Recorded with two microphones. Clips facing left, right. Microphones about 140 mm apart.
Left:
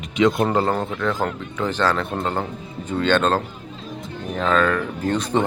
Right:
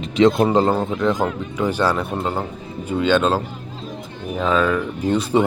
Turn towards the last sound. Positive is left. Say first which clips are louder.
# right 3 dB
turn(degrees=-10)  # may be behind; listen again after turning